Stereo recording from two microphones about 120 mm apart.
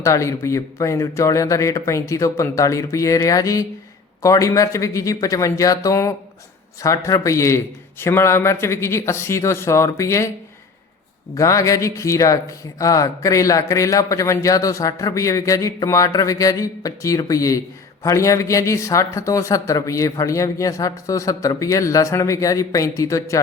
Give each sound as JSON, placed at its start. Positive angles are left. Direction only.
{"t": 0.0, "sound": "speech", "side_deg": 25}
{"t": 11.3, "sound": "speech", "side_deg": 25}